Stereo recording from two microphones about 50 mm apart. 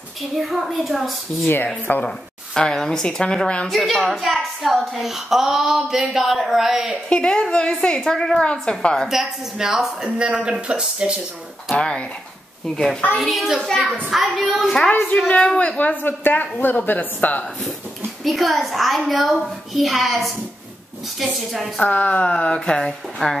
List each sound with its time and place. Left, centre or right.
0.4 s a woman's voice: centre
2.0 s speech: centre
3.6 s a woman's voice: centre
7.1 s a woman's voice: centre
8.0 s a woman's voice: centre
9.1 s speech: centre
11.7 s a woman's voice: left
13.2 s a woman's voice: centre
14.9 s speech: left
15.1 s speech: left
18.2 s a woman's voice: centre
21.8 s a woman's voice: left; by 23.3 s centre